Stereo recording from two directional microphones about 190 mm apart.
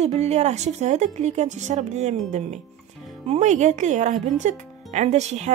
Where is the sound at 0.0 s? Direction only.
35° right (ahead or behind).